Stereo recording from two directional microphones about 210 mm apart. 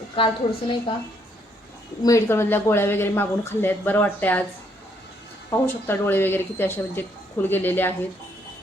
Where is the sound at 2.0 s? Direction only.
15° left (ahead or behind).